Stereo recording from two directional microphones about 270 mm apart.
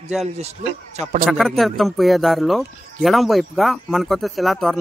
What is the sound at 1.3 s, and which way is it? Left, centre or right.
Speech, centre.